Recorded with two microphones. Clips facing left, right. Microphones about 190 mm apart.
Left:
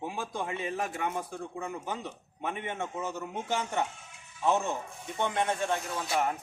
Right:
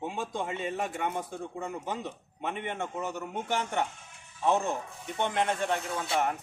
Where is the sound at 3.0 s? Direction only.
15° right (ahead or behind).